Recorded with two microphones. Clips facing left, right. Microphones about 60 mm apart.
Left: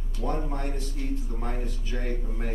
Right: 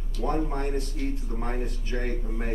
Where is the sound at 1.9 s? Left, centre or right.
Right.